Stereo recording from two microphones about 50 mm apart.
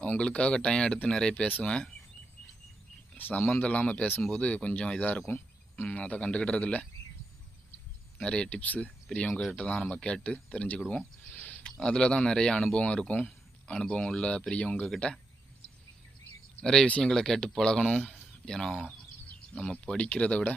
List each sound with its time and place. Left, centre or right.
0.2 s speech: left
3.5 s speech: left
5.3 s cricket: left
5.9 s speech: left
8.2 s speech: left
8.6 s speech: left
9.1 s speech: centre
16.6 s speech: centre; by 20.6 s left